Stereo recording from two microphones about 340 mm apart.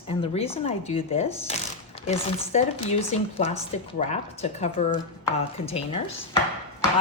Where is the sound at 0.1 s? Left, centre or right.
Centre.